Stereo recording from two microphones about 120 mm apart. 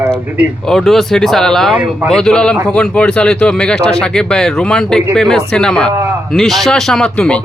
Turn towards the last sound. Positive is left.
turn(degrees=10)  # may be behind; listen again after turning